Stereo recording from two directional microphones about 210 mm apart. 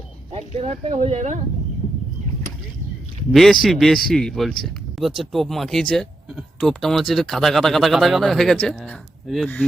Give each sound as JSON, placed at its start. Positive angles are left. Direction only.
{"t": 0.3, "sound": "speech", "side_deg": -30}
{"t": 3.3, "sound": "speech", "side_deg": 0}